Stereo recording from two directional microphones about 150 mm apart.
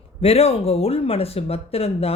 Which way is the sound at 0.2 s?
40° left (ahead or behind).